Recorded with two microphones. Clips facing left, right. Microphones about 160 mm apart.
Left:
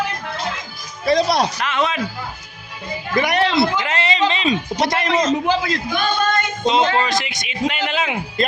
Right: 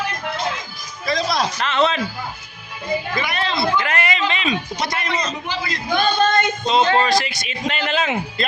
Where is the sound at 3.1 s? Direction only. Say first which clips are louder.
Left 6 dB; 75° left (ahead or behind).